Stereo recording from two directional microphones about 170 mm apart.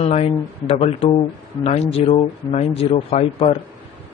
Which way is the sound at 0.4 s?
25° left (ahead or behind).